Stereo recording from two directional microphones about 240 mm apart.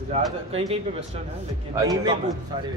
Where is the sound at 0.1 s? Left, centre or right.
Right.